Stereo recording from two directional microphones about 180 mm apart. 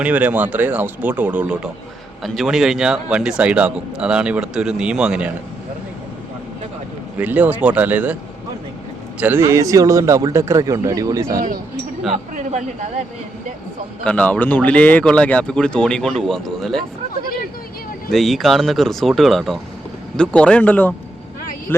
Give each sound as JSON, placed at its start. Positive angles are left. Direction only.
{"t": 0.0, "sound": "a man's voice", "side_deg": -10}
{"t": 7.2, "sound": "speech", "side_deg": -10}
{"t": 9.2, "sound": "speech", "side_deg": -15}
{"t": 11.3, "sound": "speech", "side_deg": -50}
{"t": 12.1, "sound": "a man's voice", "side_deg": -40}
{"t": 14.0, "sound": "a man's voice", "side_deg": 5}
{"t": 18.1, "sound": "a man's voice", "side_deg": 0}